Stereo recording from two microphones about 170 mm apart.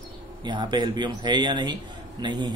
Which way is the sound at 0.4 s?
25° right (ahead or behind).